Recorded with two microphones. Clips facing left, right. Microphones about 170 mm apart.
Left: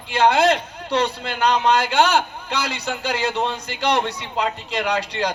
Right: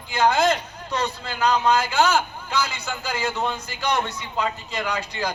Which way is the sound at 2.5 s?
65° left (ahead or behind).